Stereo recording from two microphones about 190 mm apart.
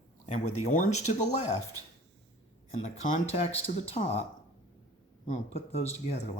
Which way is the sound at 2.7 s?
40° left (ahead or behind).